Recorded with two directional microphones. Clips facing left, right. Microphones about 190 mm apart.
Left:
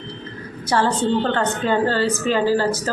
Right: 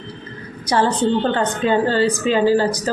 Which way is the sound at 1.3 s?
15° right (ahead or behind).